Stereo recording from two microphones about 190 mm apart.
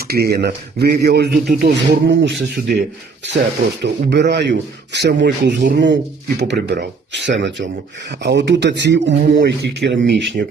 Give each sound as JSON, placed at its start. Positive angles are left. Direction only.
{"t": 0.1, "sound": "speech", "side_deg": -55}
{"t": 3.8, "sound": "speech", "side_deg": -65}